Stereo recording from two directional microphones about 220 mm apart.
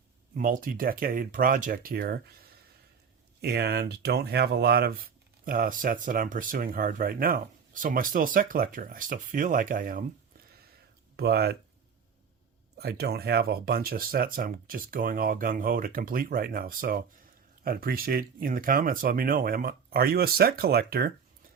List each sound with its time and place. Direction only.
0.3 s speech: 40° right (ahead or behind)
3.4 s speech: 45° right (ahead or behind)
11.2 s speech: 45° right (ahead or behind)
12.7 s speech: 45° right (ahead or behind)